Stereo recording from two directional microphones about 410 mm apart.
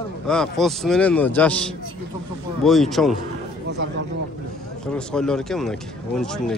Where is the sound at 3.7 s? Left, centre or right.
Right.